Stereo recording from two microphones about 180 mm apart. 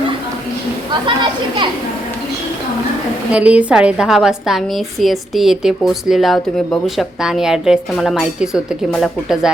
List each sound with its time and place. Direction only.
1.0 s speech: 25° right (ahead or behind)
3.3 s a woman's voice: 5° right (ahead or behind)